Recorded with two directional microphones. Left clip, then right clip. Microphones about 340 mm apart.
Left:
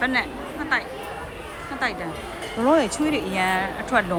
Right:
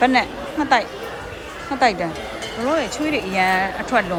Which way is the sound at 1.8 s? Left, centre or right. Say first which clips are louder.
Right 9 dB; centre.